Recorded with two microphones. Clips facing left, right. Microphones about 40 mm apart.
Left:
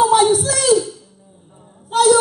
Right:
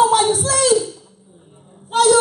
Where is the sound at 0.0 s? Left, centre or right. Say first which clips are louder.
Left 2 dB; centre.